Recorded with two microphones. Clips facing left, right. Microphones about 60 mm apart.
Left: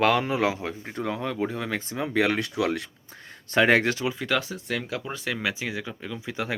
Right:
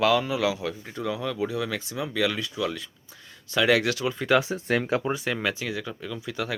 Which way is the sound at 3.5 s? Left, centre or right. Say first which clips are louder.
Left 2 dB; left.